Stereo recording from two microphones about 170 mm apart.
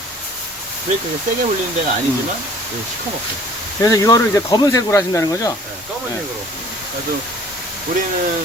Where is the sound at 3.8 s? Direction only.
20° left (ahead or behind).